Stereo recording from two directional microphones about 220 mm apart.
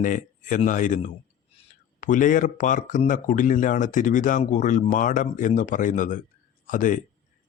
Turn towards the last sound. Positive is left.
turn(degrees=35)  # may be behind; listen again after turning